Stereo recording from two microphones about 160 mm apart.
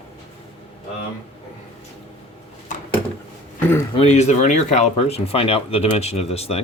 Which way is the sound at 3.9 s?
45° left (ahead or behind).